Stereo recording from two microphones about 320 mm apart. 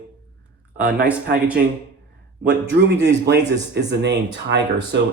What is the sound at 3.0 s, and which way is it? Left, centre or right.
Speech, right.